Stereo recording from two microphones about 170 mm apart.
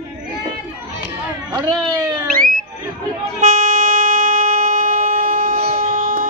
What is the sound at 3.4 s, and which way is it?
Vehicle horn, 50° right (ahead or behind).